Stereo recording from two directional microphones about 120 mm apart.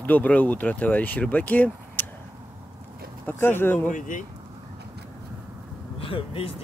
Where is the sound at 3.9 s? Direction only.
90° left.